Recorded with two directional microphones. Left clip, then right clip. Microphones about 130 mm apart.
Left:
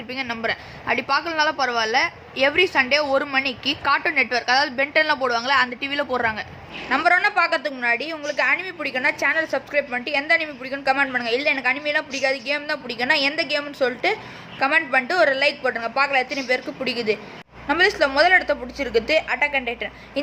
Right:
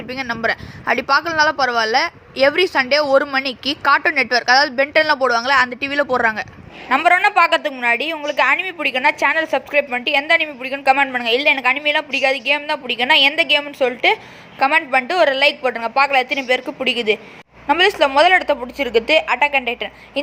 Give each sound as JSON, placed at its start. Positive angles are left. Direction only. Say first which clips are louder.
{"t": 0.1, "sound": "a woman's voice", "louder": "right 5 dB", "side_deg": -45}
{"t": 6.8, "sound": "a woman's voice", "louder": "right 4 dB", "side_deg": -30}